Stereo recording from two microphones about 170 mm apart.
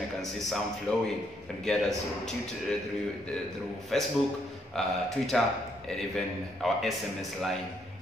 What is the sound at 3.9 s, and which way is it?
A man's voice, centre (ahead or behind).